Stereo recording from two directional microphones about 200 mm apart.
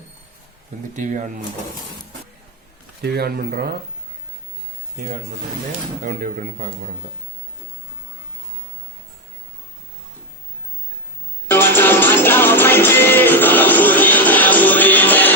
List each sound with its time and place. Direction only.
0.9 s speech: 40° right (ahead or behind)
3.0 s speech: 50° right (ahead or behind)
4.9 s speech: 45° right (ahead or behind)
11.4 s music: 10° left (ahead or behind)